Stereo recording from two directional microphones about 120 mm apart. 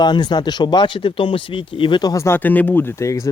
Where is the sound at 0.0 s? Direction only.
40° left (ahead or behind).